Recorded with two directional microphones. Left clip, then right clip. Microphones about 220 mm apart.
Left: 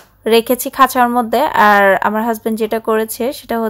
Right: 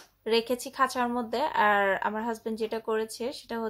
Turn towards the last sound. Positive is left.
turn(degrees=25)  # may be behind; listen again after turning